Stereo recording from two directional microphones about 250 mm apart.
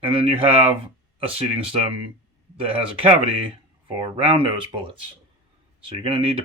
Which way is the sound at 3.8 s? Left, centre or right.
Right.